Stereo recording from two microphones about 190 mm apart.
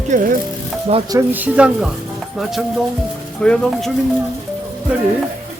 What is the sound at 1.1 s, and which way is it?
Speech, 10° right (ahead or behind).